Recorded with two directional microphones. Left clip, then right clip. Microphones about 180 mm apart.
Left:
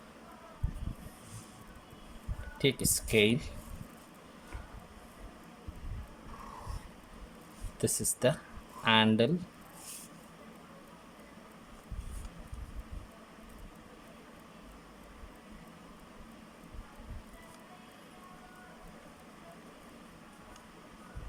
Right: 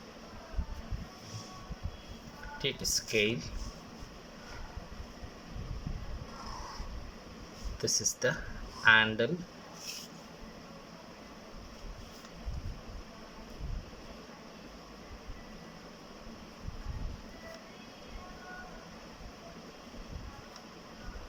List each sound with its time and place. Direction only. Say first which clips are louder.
2.6 s speech: left 2 dB; 25° left (ahead or behind)
7.8 s speech: right 1 dB; 25° left (ahead or behind)